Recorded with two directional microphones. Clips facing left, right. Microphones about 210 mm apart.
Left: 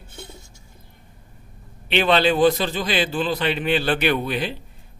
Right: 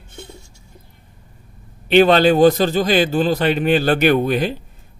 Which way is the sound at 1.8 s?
45° right (ahead or behind).